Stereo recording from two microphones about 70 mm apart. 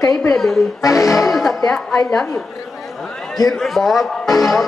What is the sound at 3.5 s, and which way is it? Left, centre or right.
Speech, centre.